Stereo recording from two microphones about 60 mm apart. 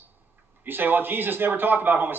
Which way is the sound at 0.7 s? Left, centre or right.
Right.